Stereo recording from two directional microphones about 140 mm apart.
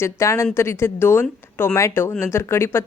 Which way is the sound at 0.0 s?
20° left (ahead or behind).